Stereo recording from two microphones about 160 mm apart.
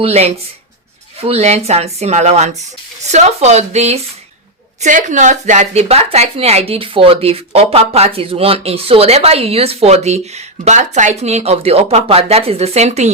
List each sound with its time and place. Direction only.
0.0 s speech: 40° right (ahead or behind)